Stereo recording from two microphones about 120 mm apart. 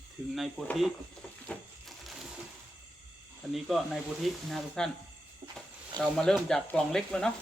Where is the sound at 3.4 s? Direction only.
Centre (ahead or behind).